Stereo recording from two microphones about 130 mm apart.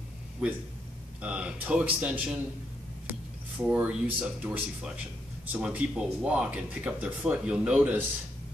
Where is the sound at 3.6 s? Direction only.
10° right (ahead or behind).